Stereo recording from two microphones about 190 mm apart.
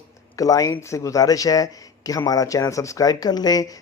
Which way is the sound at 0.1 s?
20° left (ahead or behind).